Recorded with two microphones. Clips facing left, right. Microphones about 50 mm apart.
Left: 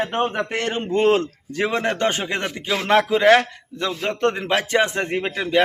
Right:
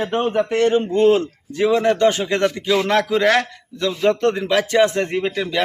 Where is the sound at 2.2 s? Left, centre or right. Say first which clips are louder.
Right 6 dB; left.